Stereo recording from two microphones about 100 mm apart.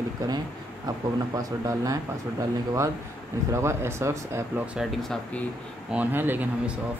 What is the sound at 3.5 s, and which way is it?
Speech, 30° right (ahead or behind).